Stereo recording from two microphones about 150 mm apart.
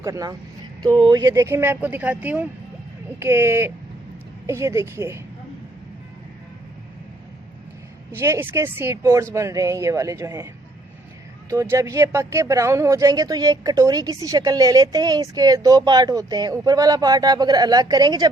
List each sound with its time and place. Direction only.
0.0 s speech: 25° right (ahead or behind)
8.1 s speech: 15° right (ahead or behind)